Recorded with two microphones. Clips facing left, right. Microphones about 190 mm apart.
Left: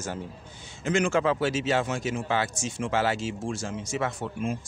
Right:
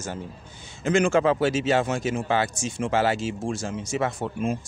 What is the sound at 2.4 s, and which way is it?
Speech, 15° right (ahead or behind).